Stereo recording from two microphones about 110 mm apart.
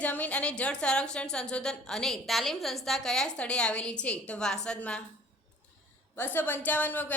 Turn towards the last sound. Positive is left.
turn(degrees=15)  # may be behind; listen again after turning